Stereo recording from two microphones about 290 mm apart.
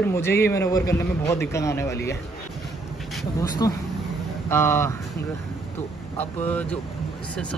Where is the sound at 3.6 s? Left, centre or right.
Centre.